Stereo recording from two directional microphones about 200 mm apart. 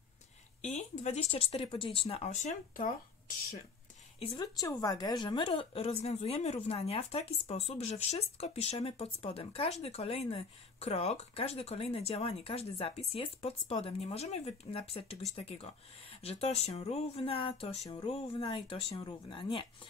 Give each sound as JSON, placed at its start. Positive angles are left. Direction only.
{"t": 0.6, "sound": "a woman's voice", "side_deg": 35}
{"t": 4.2, "sound": "a woman's voice", "side_deg": 25}